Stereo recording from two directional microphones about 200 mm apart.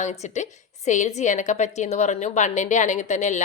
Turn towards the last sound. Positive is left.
turn(degrees=35)  # may be behind; listen again after turning